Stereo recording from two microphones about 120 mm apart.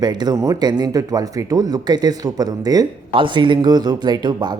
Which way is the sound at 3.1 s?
45° right (ahead or behind).